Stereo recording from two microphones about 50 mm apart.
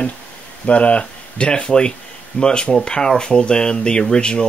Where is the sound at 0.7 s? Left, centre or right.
Left.